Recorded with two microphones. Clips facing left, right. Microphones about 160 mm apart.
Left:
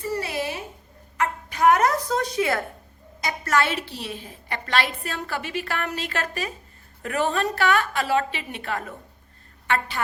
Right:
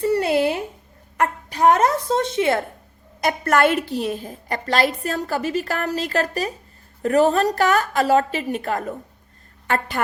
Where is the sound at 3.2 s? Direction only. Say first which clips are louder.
Right 6 dB; 55° right (ahead or behind).